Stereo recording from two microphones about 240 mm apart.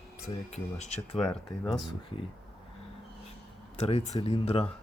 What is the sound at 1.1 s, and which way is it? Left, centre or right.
Speech, centre.